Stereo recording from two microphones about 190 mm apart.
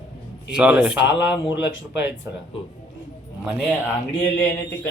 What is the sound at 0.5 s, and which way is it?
Speech, 5° right (ahead or behind).